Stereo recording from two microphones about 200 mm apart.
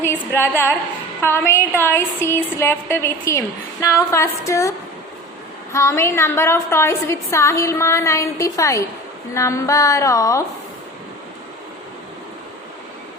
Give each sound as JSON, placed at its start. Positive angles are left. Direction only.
{"t": 0.0, "sound": "a woman's voice", "side_deg": 10}
{"t": 5.7, "sound": "a woman's voice", "side_deg": 15}